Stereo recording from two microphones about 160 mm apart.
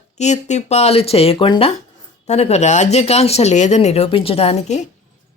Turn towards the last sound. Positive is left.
turn(degrees=45)  # may be behind; listen again after turning